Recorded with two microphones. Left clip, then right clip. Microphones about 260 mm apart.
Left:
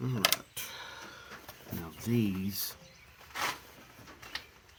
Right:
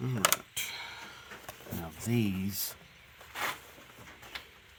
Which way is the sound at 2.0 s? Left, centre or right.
Right.